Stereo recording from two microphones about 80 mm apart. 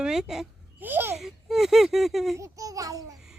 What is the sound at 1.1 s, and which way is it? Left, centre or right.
Speech, centre.